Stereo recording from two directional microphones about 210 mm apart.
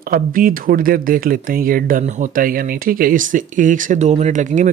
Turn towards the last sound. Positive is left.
turn(degrees=-35)  # may be behind; listen again after turning